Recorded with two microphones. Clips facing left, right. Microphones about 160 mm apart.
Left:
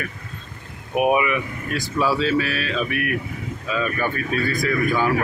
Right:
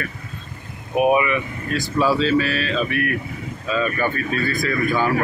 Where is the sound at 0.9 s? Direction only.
15° left (ahead or behind).